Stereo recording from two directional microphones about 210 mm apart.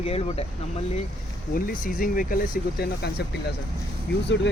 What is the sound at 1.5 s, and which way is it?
Speech, 45° left (ahead or behind).